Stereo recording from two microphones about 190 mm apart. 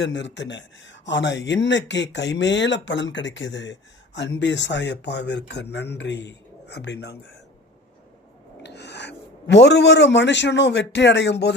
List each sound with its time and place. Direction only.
0.0 s speech: 70° left (ahead or behind)
8.6 s a man's voice: 65° left (ahead or behind)